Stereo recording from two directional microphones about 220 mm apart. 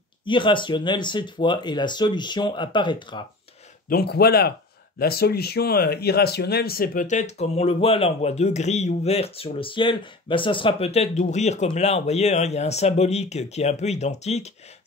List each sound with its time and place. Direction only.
0.2 s speech: 20° left (ahead or behind)
3.9 s speech: 45° left (ahead or behind); by 14.5 s 30° left (ahead or behind)